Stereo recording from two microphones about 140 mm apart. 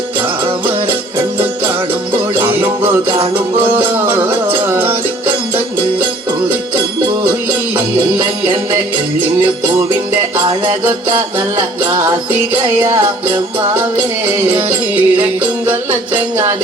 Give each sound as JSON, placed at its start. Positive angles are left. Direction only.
{"t": 2.3, "sound": "music", "side_deg": -15}
{"t": 12.8, "sound": "music", "side_deg": -15}
{"t": 14.4, "sound": "music", "side_deg": -10}